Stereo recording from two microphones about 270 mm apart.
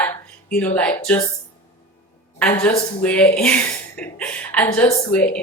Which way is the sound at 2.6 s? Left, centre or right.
Centre.